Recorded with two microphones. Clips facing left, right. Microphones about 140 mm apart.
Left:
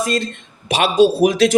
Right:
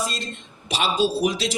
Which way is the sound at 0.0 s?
60° left (ahead or behind).